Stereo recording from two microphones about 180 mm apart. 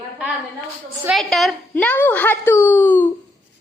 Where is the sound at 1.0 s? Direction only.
Centre (ahead or behind).